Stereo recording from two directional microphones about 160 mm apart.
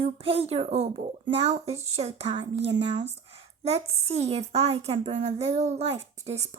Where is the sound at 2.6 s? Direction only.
40° right (ahead or behind).